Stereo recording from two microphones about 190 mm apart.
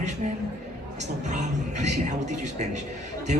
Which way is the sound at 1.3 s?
40° right (ahead or behind).